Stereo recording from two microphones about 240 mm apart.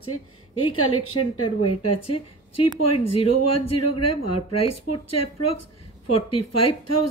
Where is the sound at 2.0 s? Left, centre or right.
Left.